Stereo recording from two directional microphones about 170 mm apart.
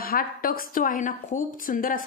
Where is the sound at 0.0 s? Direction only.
60° left (ahead or behind).